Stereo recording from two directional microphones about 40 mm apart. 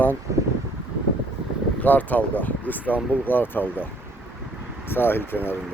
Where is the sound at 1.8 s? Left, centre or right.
Left.